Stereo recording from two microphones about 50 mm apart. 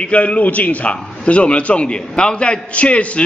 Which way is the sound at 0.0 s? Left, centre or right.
Left.